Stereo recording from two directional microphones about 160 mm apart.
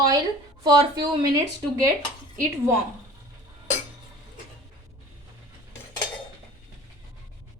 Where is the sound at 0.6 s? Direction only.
25° right (ahead or behind).